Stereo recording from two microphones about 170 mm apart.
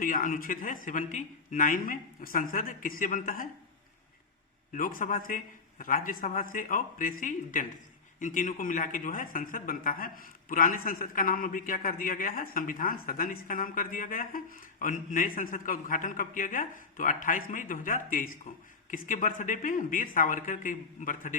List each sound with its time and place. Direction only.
0.0 s a man's voice: 55° left (ahead or behind)
4.7 s a man's voice: 55° left (ahead or behind)